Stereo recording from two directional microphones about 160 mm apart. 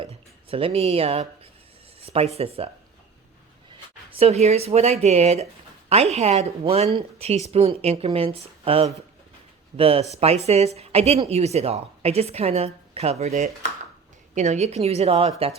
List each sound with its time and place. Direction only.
0.5 s speech: 35° right (ahead or behind)
4.2 s speech: 40° right (ahead or behind)